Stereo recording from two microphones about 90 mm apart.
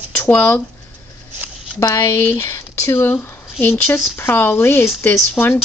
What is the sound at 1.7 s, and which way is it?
A woman's voice, 35° left (ahead or behind).